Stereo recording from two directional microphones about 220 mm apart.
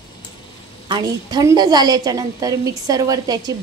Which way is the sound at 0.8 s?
20° right (ahead or behind).